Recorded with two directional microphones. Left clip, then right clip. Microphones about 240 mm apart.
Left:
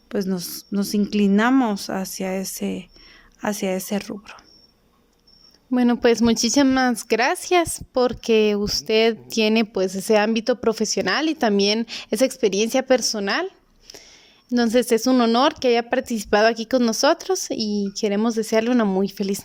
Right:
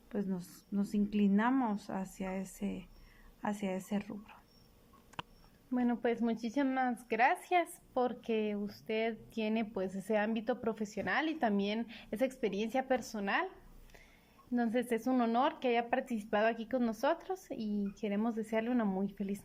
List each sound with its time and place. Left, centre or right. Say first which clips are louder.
0.1 s speech: left 15 dB; left
5.7 s speech: left 16 dB; left
14.5 s speech: left 16 dB; left